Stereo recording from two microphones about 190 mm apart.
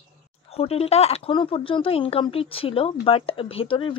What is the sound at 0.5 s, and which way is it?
Speech, 30° left (ahead or behind).